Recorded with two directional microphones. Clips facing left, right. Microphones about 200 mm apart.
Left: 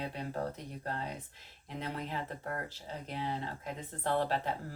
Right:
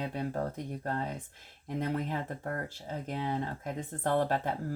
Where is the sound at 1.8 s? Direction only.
50° right (ahead or behind).